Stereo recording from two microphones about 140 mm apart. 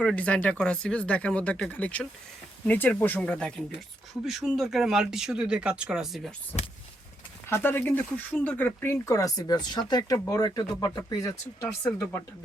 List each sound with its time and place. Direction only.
0.0 s speech: 10° left (ahead or behind)
7.5 s speech: 15° left (ahead or behind)